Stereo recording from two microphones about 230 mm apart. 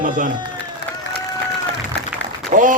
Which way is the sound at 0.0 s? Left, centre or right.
Right.